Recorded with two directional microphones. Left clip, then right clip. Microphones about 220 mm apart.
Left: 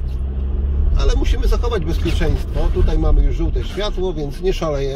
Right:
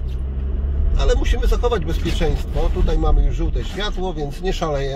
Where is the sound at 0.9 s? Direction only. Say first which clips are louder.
Right 3 dB; 25° right (ahead or behind).